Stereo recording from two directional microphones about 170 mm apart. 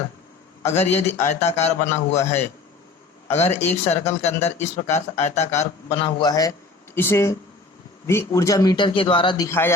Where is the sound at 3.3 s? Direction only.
40° left (ahead or behind).